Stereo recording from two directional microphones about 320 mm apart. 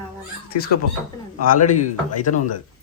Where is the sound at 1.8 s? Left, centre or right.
Left.